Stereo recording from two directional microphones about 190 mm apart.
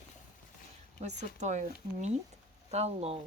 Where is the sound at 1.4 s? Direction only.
40° right (ahead or behind).